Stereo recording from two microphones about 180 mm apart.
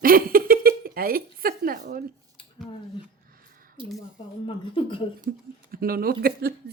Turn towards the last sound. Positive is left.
turn(degrees=-55)  # may be behind; listen again after turning